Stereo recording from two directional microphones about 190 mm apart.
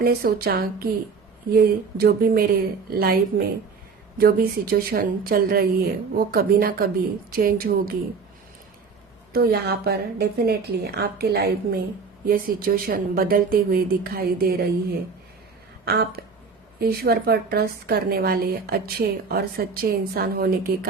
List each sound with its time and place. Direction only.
0.0 s a woman's voice: 55° right (ahead or behind)
9.3 s a woman's voice: 55° right (ahead or behind)
15.8 s a woman's voice: 55° right (ahead or behind)